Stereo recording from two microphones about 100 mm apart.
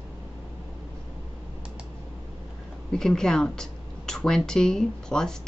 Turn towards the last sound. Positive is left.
turn(degrees=5)  # may be behind; listen again after turning